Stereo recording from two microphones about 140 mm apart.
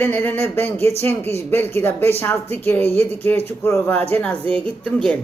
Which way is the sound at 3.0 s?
45° right (ahead or behind).